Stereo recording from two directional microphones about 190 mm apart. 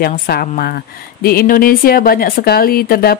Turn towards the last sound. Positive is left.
turn(degrees=50)  # may be behind; listen again after turning